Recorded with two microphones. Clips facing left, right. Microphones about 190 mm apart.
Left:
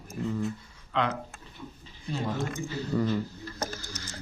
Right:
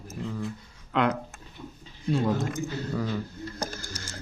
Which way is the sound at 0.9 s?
50° right (ahead or behind).